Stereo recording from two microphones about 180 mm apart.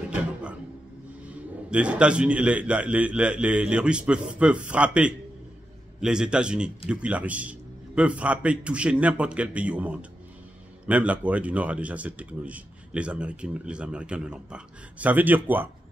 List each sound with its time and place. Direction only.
0.1 s music: 5° right (ahead or behind)
1.7 s a man's voice: 5° right (ahead or behind)